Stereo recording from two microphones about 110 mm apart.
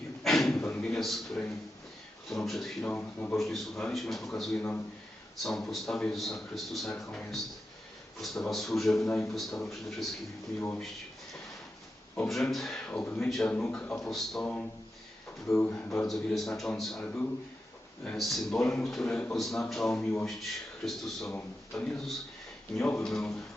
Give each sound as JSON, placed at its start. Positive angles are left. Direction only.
{"t": 0.2, "sound": "a sound", "side_deg": 5}
{"t": 2.5, "sound": "a man's voice", "side_deg": 5}
{"t": 3.3, "sound": "a man's voice", "side_deg": 0}
{"t": 12.3, "sound": "a man's voice", "side_deg": 0}
{"t": 12.9, "sound": "a man's voice", "side_deg": 15}
{"t": 13.1, "sound": "a man's voice", "side_deg": 5}
{"t": 15.7, "sound": "a man's voice", "side_deg": 15}
{"t": 16.0, "sound": "a man's voice", "side_deg": 0}
{"t": 17.0, "sound": "a man's voice", "side_deg": 15}
{"t": 21.3, "sound": "a man's voice", "side_deg": 10}